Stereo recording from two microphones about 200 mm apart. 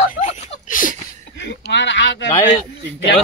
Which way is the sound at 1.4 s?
60° left (ahead or behind).